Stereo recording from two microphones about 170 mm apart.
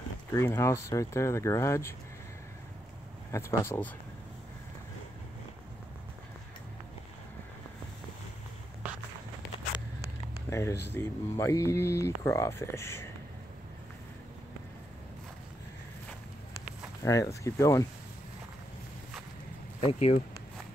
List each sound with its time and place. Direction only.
0.3 s speech: 15° left (ahead or behind)
3.3 s speech: 15° left (ahead or behind)
10.5 s speech: 15° left (ahead or behind)
17.0 s speech: 20° left (ahead or behind)
19.9 s speech: 35° left (ahead or behind)